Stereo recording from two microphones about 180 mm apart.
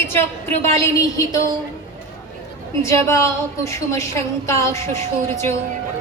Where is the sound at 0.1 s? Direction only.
15° left (ahead or behind).